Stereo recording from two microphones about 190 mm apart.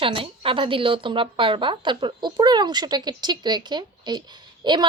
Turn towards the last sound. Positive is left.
turn(degrees=-20)  # may be behind; listen again after turning